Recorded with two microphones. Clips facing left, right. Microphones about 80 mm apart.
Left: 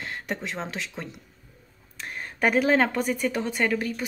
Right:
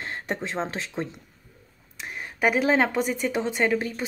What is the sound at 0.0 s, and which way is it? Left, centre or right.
Speech, right.